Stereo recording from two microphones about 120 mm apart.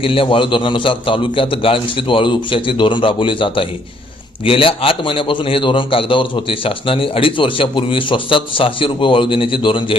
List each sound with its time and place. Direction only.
0.0 s a man's voice: 50° left (ahead or behind)